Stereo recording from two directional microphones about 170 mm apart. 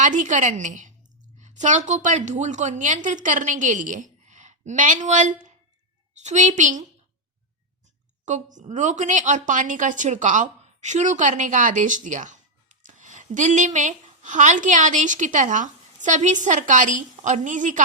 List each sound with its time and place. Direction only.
0.0 s a woman's voice: 45° right (ahead or behind)
8.5 s speech: 45° right (ahead or behind)